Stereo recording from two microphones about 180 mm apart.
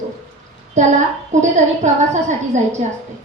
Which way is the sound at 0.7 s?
40° right (ahead or behind).